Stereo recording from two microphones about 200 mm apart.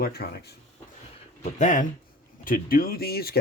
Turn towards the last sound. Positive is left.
turn(degrees=50)  # may be behind; listen again after turning